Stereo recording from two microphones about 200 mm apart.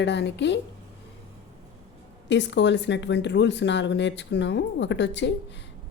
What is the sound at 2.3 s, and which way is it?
Speech, 60° left (ahead or behind).